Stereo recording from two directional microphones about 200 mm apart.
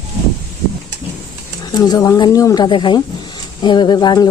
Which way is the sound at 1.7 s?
20° left (ahead or behind).